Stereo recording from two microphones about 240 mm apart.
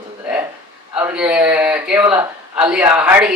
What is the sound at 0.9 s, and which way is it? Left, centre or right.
A man's voice, centre.